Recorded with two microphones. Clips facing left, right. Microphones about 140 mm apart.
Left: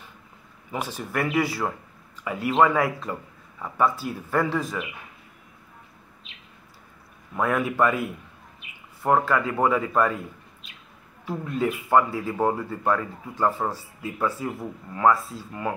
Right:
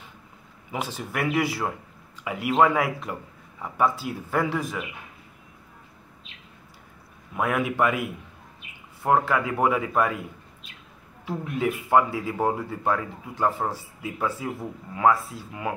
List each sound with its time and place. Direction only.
0.7 s speech: 20° right (ahead or behind)
7.3 s speech: 15° right (ahead or behind)
11.2 s speech: 15° right (ahead or behind)